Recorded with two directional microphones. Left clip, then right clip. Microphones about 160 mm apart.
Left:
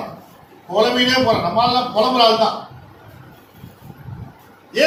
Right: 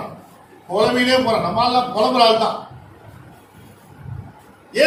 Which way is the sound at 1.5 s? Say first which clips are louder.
Left 1 dB; 25° right (ahead or behind).